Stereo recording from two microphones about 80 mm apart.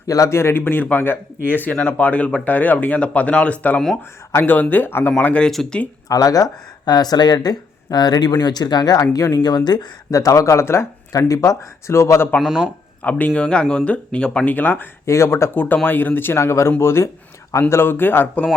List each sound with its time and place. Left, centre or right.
0.1 s a man's voice: left
5.2 s speech: centre
6.1 s speech: left
10.1 s speech: left
11.1 s speech: left
12.4 s speech: centre
13.0 s speech: centre
14.4 s a man's voice: left
15.0 s a man's voice: left